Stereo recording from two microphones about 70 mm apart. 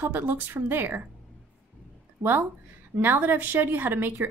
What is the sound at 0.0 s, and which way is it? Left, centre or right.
Speech, right.